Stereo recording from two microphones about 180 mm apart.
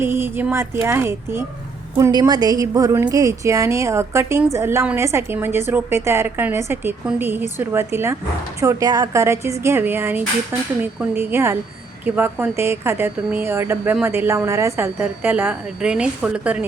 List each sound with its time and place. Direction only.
0.0 s speech: 15° right (ahead or behind)